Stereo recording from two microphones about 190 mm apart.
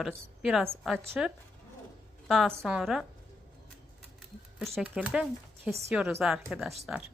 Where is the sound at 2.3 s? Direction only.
Centre (ahead or behind).